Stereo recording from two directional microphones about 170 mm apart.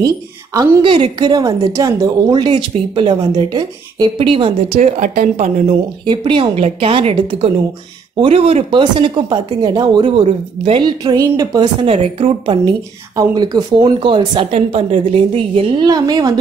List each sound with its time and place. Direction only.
0.6 s a woman's voice: 30° right (ahead or behind)
5.0 s speech: 50° right (ahead or behind)
6.0 s a woman's voice: 30° right (ahead or behind)
15.5 s a woman's voice: 25° right (ahead or behind)